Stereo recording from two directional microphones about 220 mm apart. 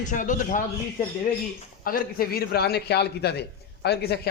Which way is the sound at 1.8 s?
40° left (ahead or behind).